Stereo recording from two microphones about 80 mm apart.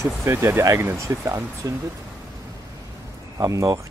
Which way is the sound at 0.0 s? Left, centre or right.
Right.